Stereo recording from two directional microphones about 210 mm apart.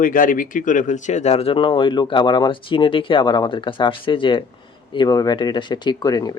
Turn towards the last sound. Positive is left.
turn(degrees=20)  # may be behind; listen again after turning